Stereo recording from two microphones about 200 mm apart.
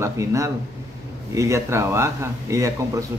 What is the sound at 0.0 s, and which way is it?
Speech, 15° right (ahead or behind).